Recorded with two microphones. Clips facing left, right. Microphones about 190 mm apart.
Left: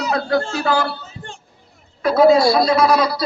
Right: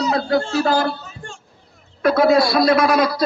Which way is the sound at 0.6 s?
40° right (ahead or behind).